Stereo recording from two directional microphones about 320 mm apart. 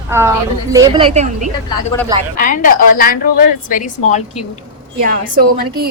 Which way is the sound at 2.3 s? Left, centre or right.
Left.